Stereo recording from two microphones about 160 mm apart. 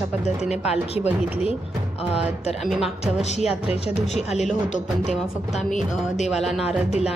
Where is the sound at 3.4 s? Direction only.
5° right (ahead or behind).